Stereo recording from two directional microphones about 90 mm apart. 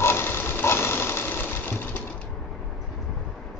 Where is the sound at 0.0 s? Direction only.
25° left (ahead or behind).